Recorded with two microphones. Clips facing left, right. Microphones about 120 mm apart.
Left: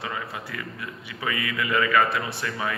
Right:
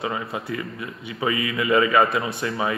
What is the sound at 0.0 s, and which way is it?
Speech, 25° right (ahead or behind).